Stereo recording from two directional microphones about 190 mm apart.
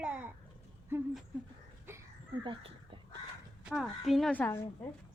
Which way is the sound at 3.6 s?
Centre (ahead or behind).